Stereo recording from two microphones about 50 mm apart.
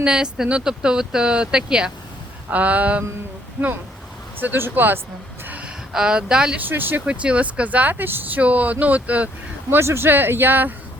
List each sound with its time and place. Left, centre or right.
0.0 s speech: centre
2.5 s speech: right
4.4 s speech: right
5.6 s speech: centre
6.7 s speech: right
7.0 s speech: right
8.4 s speech: right
9.6 s speech: right